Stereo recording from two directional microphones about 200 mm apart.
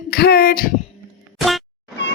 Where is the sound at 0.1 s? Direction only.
50° left (ahead or behind).